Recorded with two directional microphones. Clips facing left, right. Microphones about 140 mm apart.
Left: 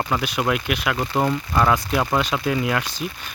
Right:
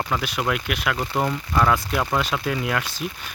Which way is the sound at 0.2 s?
Centre (ahead or behind).